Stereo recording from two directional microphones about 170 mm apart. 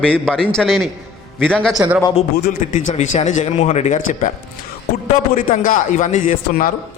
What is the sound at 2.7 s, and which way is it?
A man's voice, 45° left (ahead or behind).